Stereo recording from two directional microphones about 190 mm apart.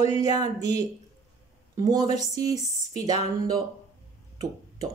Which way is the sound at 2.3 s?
20° right (ahead or behind).